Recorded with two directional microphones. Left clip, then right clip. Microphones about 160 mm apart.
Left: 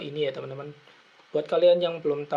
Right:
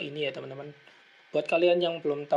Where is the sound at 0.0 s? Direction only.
20° right (ahead or behind).